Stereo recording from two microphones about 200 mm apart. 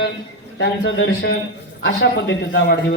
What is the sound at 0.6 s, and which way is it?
A man's voice, 60° left (ahead or behind).